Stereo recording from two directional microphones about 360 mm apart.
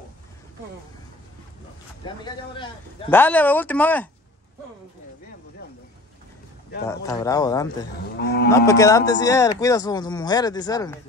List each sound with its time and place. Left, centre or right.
2.2 s a man's voice: centre
6.9 s speech: centre
8.2 s moo: left
8.5 s speech: centre